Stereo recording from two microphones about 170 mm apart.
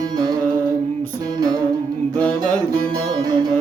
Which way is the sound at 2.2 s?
10° left (ahead or behind).